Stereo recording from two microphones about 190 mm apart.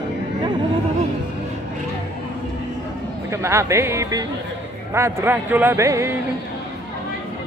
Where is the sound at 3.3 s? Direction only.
15° right (ahead or behind).